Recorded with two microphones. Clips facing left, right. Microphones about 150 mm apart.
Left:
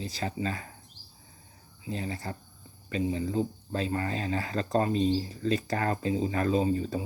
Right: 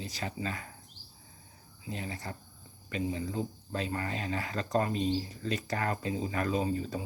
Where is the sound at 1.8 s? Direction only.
30° left (ahead or behind).